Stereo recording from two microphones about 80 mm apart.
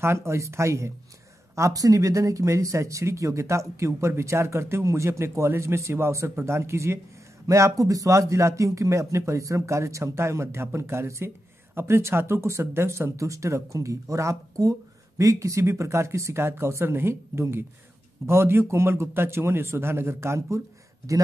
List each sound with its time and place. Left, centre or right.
0.0 s speech: right